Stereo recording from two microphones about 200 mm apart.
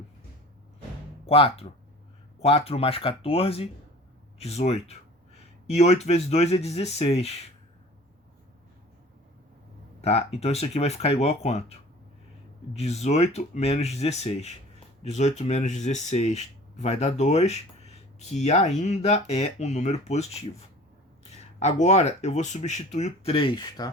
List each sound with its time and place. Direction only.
1.2 s speech: 30° left (ahead or behind)
10.0 s speech: 30° left (ahead or behind)